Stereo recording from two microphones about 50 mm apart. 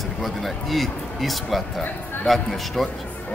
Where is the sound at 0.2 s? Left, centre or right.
Centre.